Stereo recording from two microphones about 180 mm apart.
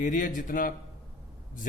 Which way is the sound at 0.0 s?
50° left (ahead or behind).